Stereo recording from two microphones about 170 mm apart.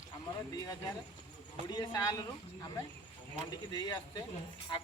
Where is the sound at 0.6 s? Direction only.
20° left (ahead or behind).